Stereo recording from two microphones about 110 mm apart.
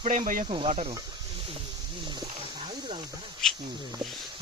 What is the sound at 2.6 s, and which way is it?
Wild animals, 55° right (ahead or behind).